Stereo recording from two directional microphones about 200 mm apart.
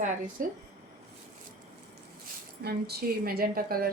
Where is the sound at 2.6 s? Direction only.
50° right (ahead or behind).